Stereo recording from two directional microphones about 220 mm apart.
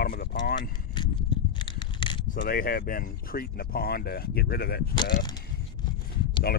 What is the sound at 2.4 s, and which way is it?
Speech, 40° left (ahead or behind).